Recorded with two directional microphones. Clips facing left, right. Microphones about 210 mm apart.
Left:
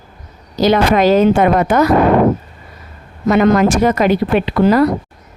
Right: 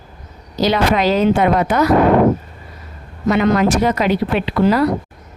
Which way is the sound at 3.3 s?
50° left (ahead or behind).